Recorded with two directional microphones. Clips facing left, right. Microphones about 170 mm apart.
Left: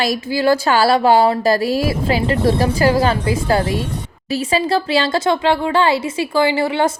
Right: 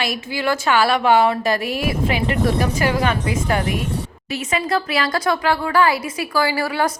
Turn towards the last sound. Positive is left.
turn(degrees=25)  # may be behind; listen again after turning